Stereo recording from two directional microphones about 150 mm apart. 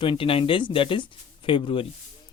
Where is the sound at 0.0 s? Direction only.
35° left (ahead or behind).